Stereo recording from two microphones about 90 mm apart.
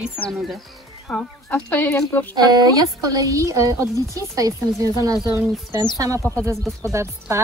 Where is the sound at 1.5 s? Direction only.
20° left (ahead or behind).